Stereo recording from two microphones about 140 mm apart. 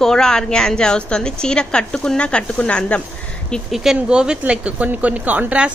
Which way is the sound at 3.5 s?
Centre (ahead or behind).